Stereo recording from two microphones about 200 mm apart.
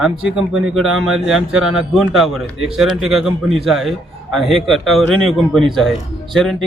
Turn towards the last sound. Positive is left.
turn(degrees=0)  # may be behind; listen again after turning